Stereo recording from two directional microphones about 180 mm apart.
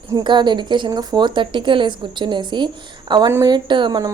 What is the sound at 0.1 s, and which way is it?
A woman's voice, 25° right (ahead or behind).